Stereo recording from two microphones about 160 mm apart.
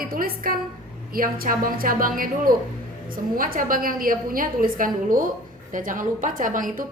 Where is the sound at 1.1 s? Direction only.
65° right (ahead or behind).